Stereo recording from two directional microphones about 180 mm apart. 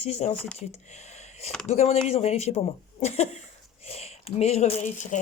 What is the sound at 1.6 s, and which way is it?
Speech, 40° left (ahead or behind).